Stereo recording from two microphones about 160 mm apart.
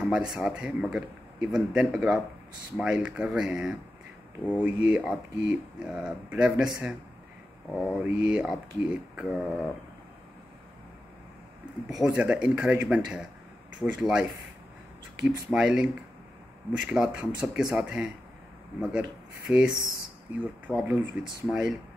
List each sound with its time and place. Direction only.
0.1 s a man's voice: 5° right (ahead or behind)
11.9 s a man's voice: 5° right (ahead or behind)
15.2 s a man's voice: 5° right (ahead or behind)
19.4 s a man's voice: 5° right (ahead or behind)